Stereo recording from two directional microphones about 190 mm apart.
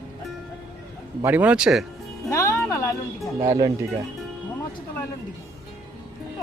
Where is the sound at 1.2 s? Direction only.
10° right (ahead or behind).